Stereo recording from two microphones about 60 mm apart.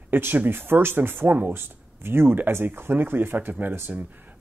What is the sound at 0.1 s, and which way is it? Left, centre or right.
Speech, right.